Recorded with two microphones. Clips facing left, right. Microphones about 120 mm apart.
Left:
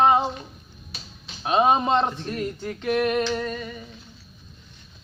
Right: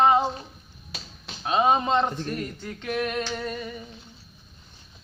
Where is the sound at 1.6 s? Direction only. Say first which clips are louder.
Left 1 dB; 10° left (ahead or behind).